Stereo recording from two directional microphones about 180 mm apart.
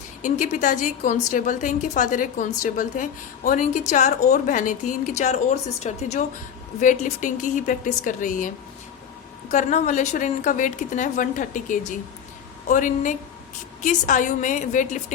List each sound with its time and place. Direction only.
0.2 s a woman's voice: 45° left (ahead or behind)